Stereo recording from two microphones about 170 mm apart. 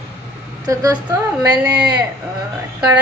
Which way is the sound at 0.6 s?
20° right (ahead or behind).